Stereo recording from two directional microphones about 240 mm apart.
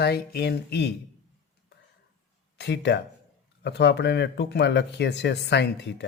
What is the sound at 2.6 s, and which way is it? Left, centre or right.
Speech, left.